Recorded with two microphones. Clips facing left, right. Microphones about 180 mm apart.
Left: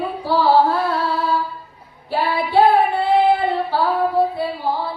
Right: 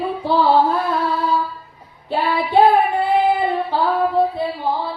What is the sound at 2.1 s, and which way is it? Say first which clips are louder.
Child singing: right 1 dB; 20° right (ahead or behind).